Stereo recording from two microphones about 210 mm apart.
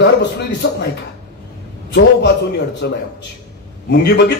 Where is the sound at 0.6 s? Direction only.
50° left (ahead or behind).